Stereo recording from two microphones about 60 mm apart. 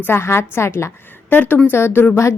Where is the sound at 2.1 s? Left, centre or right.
Left.